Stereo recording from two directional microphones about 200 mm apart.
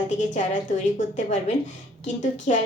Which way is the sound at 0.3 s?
40° left (ahead or behind).